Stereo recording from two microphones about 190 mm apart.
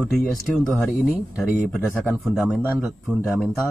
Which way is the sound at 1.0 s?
5° right (ahead or behind).